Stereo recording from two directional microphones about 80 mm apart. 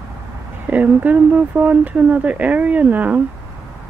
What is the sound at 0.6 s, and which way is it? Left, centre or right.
Speech, centre.